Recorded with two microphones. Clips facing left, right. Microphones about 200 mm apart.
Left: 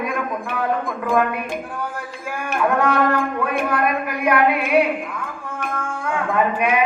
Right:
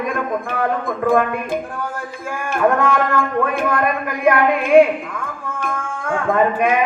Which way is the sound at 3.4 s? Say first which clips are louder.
Right 2 dB; 50° right (ahead or behind).